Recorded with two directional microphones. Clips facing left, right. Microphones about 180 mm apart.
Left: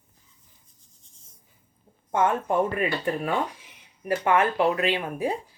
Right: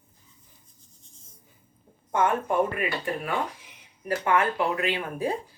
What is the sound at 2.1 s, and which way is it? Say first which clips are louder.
Speech: left 1 dB; 25° left (ahead or behind).